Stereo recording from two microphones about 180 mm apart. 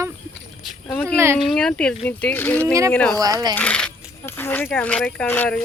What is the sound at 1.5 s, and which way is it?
Speech, 5° left (ahead or behind).